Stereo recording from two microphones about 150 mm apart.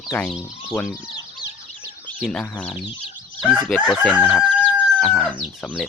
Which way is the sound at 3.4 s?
5° right (ahead or behind).